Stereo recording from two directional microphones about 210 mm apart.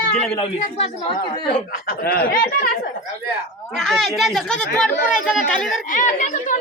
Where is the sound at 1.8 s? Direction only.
45° left (ahead or behind).